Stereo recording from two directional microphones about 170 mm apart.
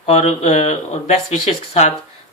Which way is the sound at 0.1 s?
40° left (ahead or behind).